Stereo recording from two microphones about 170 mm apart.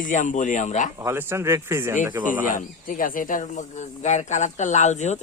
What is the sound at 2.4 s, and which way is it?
Speech, 50° left (ahead or behind).